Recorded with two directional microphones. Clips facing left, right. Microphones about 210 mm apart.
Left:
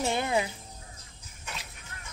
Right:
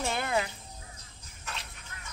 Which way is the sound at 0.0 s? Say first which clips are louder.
Left 3 dB; 20° left (ahead or behind).